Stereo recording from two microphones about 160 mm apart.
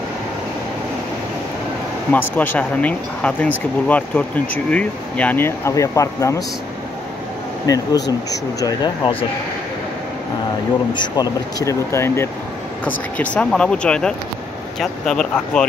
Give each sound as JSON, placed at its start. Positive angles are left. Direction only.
{"t": 2.1, "sound": "speech", "side_deg": 15}
{"t": 7.6, "sound": "speech", "side_deg": 20}
{"t": 10.9, "sound": "speech", "side_deg": 25}